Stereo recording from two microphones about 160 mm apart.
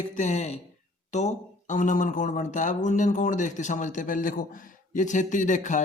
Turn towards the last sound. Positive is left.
turn(degrees=50)  # may be behind; listen again after turning